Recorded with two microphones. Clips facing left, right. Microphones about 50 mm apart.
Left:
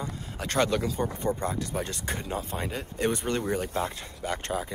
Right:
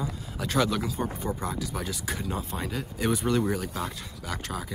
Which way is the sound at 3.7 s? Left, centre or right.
Left.